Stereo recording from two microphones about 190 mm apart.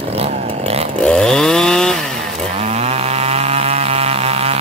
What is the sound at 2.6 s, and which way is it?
Chainsaw, 35° right (ahead or behind).